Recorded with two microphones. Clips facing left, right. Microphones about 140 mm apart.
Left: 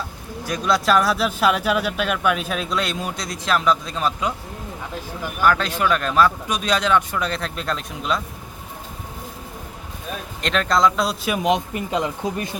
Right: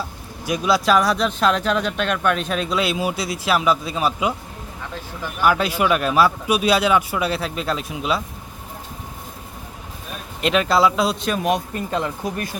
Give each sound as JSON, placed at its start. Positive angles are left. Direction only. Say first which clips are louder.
{"t": 0.4, "sound": "speech", "louder": "right 2 dB", "side_deg": -5}
{"t": 5.4, "sound": "speech", "louder": "right 1 dB", "side_deg": -10}
{"t": 10.4, "sound": "speech", "louder": "right 2 dB", "side_deg": -5}
{"t": 11.4, "sound": "speech", "louder": "left 3 dB", "side_deg": 20}